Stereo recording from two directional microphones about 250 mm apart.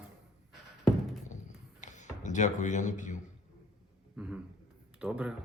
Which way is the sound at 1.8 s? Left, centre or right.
Left.